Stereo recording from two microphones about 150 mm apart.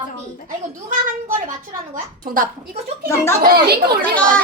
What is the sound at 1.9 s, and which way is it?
Speech, 65° right (ahead or behind).